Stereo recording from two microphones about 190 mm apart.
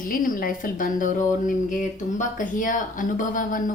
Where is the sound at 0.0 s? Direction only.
45° left (ahead or behind).